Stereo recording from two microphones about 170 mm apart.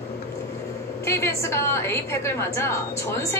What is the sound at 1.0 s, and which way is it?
A woman's voice, 15° left (ahead or behind).